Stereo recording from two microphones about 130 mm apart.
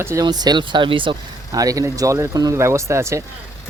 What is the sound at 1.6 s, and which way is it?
Speech, 25° right (ahead or behind).